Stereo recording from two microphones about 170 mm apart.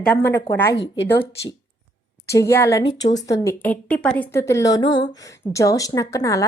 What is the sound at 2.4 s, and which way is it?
A woman's voice, 15° left (ahead or behind).